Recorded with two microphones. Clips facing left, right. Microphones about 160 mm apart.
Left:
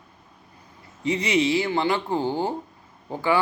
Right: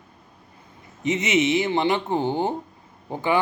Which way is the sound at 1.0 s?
20° right (ahead or behind).